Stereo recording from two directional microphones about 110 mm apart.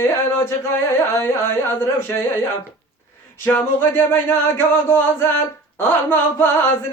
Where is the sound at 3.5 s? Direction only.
20° left (ahead or behind).